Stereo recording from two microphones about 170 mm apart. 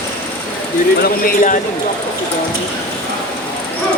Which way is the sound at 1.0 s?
55° left (ahead or behind).